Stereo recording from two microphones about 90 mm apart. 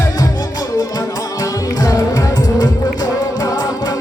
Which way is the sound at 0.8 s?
45° left (ahead or behind).